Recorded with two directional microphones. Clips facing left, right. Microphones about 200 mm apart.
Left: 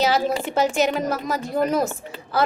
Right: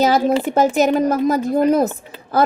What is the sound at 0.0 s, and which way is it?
A woman's voice, 50° right (ahead or behind).